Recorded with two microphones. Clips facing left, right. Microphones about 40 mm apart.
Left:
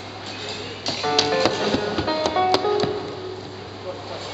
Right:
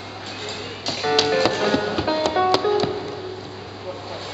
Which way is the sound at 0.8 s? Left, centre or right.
Centre.